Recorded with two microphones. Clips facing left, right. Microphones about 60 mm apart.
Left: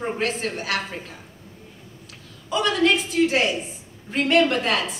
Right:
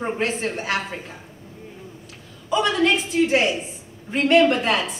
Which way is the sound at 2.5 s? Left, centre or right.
Centre.